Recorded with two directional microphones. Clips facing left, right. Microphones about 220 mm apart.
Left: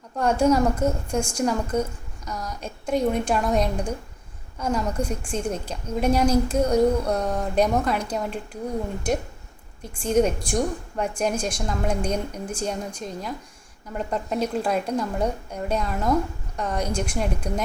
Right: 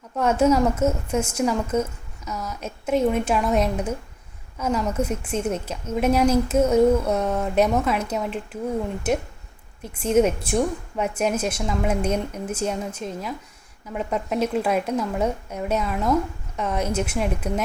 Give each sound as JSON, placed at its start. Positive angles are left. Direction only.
{"t": 0.2, "sound": "a woman's voice", "side_deg": -5}
{"t": 9.9, "sound": "a woman's voice", "side_deg": -5}